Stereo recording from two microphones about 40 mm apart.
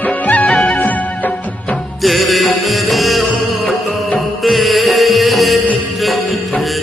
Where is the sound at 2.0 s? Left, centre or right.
Centre.